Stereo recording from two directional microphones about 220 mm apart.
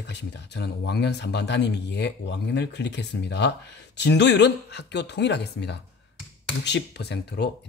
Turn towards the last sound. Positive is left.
turn(degrees=50)  # may be behind; listen again after turning